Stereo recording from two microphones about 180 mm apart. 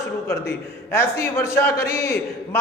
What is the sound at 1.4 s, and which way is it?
Speech, 15° left (ahead or behind).